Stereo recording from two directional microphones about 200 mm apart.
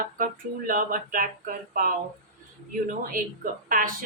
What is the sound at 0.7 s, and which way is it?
Speech, 45° right (ahead or behind).